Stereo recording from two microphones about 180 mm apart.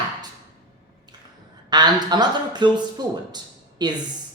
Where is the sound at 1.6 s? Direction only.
25° right (ahead or behind).